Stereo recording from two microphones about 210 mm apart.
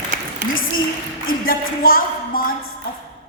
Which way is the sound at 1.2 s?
45° left (ahead or behind).